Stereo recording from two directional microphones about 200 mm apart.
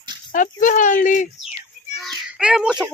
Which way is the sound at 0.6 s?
40° left (ahead or behind).